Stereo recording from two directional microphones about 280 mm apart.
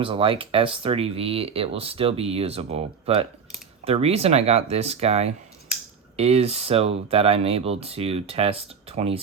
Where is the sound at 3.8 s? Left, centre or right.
Right.